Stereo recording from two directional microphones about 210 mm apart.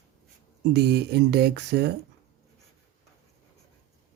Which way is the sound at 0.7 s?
50° right (ahead or behind).